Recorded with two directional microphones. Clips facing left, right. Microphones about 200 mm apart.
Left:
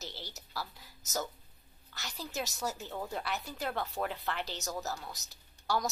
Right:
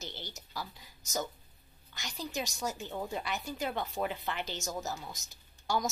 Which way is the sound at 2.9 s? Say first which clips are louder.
Right 1 dB; 5° right (ahead or behind).